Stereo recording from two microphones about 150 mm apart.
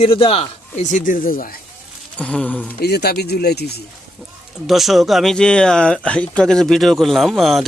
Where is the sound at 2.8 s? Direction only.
90° left.